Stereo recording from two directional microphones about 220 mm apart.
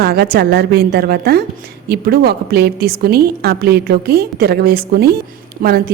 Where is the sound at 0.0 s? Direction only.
45° right (ahead or behind).